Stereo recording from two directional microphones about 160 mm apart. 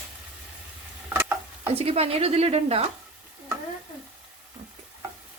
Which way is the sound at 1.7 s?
40° right (ahead or behind).